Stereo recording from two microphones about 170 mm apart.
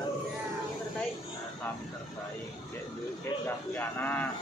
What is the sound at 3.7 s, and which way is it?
Speech, 10° left (ahead or behind).